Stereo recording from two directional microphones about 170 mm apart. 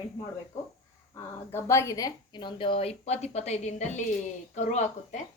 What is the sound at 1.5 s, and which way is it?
A woman's voice, 15° left (ahead or behind).